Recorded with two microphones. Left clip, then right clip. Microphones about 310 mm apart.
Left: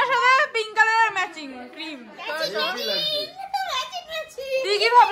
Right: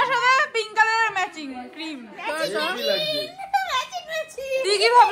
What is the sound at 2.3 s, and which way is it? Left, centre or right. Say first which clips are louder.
Children playing: right 1 dB; right.